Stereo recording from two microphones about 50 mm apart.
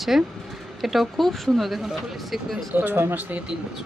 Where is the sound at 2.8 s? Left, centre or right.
Right.